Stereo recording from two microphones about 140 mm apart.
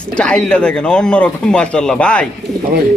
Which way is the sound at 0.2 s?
5° left (ahead or behind).